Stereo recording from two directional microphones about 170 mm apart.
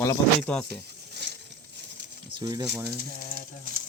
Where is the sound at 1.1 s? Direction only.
75° right (ahead or behind).